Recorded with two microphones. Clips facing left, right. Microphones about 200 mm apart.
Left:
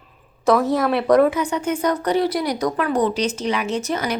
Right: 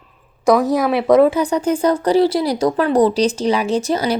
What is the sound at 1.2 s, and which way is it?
Speech, 30° right (ahead or behind).